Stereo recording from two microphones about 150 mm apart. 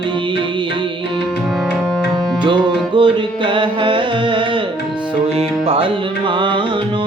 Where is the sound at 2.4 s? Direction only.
30° right (ahead or behind).